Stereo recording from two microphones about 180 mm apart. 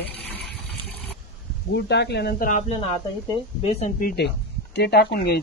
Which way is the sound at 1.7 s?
70° left (ahead or behind).